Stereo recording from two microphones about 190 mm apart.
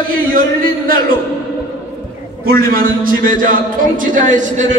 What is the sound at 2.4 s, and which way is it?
A man's voice, 50° right (ahead or behind).